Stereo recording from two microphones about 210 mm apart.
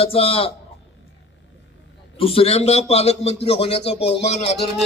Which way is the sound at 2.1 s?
25° left (ahead or behind).